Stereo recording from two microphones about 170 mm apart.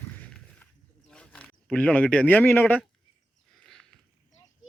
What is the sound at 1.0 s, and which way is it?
Speech, 5° left (ahead or behind).